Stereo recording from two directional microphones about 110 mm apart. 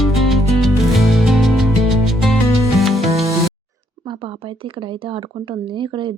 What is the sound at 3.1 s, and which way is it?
Music, 70° right (ahead or behind).